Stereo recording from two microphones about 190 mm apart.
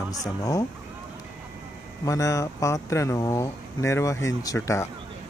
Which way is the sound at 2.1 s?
15° left (ahead or behind).